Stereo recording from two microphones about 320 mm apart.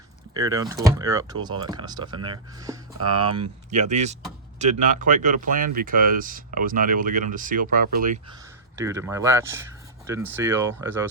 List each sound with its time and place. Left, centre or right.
0.3 s speech: centre
3.0 s speech: right
3.7 s speech: right
8.8 s speech: centre